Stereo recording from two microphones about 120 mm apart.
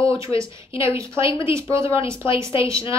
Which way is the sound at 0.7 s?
50° left (ahead or behind).